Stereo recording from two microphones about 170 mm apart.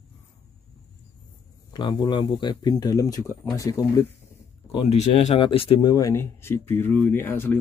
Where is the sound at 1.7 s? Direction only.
25° left (ahead or behind).